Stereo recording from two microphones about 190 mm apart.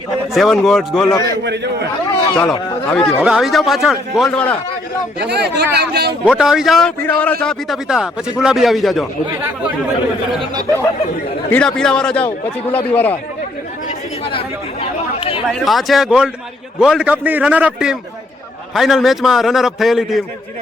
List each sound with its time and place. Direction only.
0.3 s speech: centre (ahead or behind)
2.4 s a man's voice: 10° left (ahead or behind)
3.2 s speech: 5° right (ahead or behind)
5.2 s speech: 60° right (ahead or behind)
6.2 s speech: 5° right (ahead or behind)
11.5 s a man's voice: 5° left (ahead or behind)
14.3 s chatter: 30° left (ahead or behind)
15.4 s a man's voice: centre (ahead or behind)